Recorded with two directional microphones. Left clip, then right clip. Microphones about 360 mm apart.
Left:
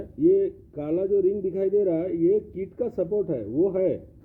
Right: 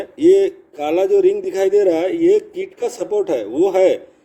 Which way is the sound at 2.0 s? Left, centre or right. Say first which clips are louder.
Right 8 dB; right.